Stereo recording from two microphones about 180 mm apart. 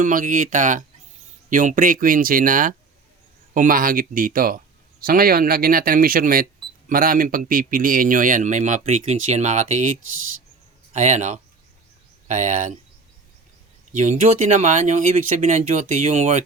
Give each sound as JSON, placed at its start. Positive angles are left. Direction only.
{"t": 0.0, "sound": "speech", "side_deg": -50}
{"t": 10.9, "sound": "speech", "side_deg": -40}
{"t": 13.9, "sound": "speech", "side_deg": -45}